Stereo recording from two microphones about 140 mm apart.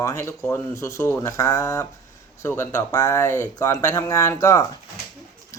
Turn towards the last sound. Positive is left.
turn(degrees=20)  # may be behind; listen again after turning